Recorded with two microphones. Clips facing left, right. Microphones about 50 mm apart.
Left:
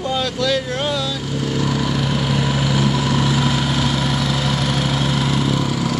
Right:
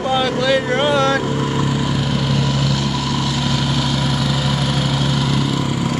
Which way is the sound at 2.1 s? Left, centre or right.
Centre.